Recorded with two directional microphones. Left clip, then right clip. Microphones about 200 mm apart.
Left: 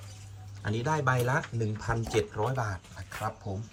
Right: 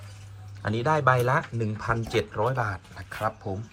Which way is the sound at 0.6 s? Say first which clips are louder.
Right 6 dB; 5° left (ahead or behind).